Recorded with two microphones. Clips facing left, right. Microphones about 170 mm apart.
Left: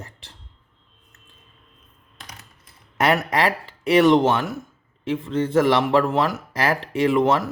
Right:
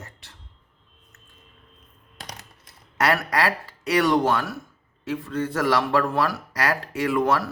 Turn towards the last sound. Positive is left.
turn(degrees=20)  # may be behind; listen again after turning